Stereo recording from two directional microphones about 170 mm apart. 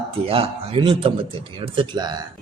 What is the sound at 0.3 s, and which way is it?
A man's voice, 35° right (ahead or behind).